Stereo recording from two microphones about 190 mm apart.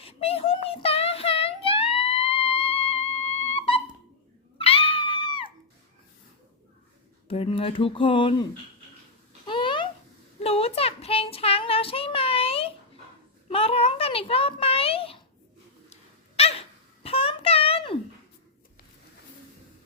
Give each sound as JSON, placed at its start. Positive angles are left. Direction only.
{"t": 0.0, "sound": "child singing", "side_deg": 30}
{"t": 4.6, "sound": "music", "side_deg": 30}
{"t": 7.3, "sound": "speech", "side_deg": 30}
{"t": 9.5, "sound": "babbling", "side_deg": 25}
{"t": 10.4, "sound": "child singing", "side_deg": 30}
{"t": 13.5, "sound": "a sound", "side_deg": 30}
{"t": 16.4, "sound": "a sound", "side_deg": 30}